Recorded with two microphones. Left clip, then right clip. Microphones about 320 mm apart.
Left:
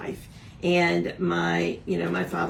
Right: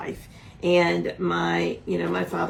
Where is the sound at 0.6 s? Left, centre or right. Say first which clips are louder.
Right 2 dB; centre.